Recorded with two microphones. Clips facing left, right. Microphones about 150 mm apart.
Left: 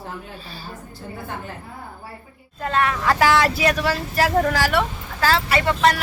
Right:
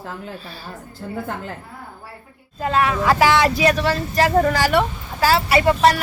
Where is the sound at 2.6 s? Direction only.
5° right (ahead or behind).